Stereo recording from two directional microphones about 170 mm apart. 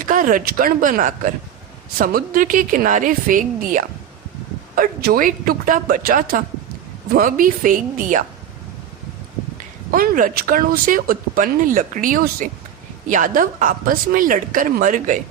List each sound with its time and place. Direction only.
0.0 s speech: 50° right (ahead or behind)
4.7 s speech: 60° right (ahead or behind)
9.9 s speech: 55° right (ahead or behind)